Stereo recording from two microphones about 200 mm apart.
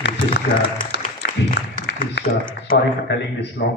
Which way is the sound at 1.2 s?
60° left (ahead or behind).